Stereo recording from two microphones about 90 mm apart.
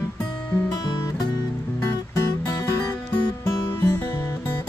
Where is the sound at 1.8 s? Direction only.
30° left (ahead or behind).